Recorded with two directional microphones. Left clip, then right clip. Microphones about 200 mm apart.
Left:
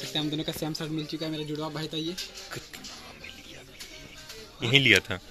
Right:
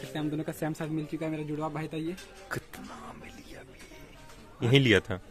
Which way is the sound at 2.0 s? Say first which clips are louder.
Left 3 dB; 40° right (ahead or behind).